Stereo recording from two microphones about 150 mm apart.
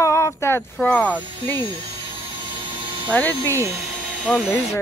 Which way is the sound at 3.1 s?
10° left (ahead or behind).